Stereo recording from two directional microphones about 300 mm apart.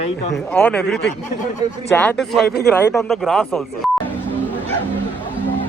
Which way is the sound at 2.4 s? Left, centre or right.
Left.